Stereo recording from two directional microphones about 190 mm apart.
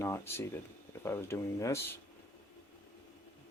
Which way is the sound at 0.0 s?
15° left (ahead or behind).